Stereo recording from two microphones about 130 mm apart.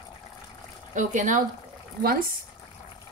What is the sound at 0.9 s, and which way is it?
Speech, 75° right (ahead or behind).